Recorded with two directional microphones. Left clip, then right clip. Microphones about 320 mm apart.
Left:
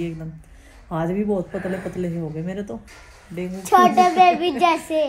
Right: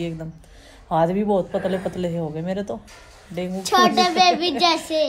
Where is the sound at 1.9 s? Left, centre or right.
Centre.